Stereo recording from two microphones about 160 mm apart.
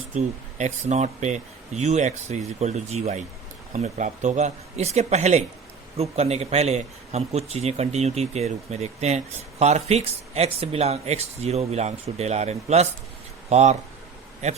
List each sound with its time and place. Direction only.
0.1 s speech: 50° right (ahead or behind)